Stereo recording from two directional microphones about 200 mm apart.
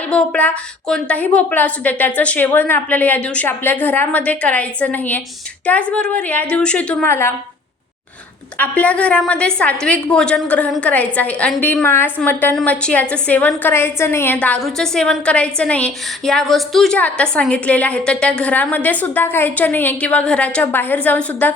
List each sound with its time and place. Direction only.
0.1 s a woman's voice: 5° left (ahead or behind)
8.5 s a woman's voice: 5° left (ahead or behind)